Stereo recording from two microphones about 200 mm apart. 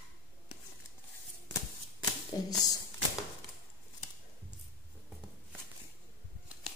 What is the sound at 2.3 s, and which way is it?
Speech, 20° left (ahead or behind).